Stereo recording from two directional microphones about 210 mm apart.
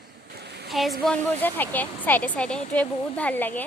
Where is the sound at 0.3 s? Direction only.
50° right (ahead or behind).